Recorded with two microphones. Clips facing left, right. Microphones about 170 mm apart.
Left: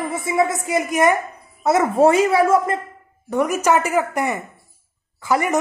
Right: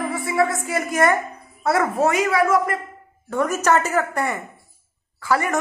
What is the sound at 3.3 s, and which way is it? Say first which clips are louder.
A woman's voice: left 2 dB; 15° left (ahead or behind).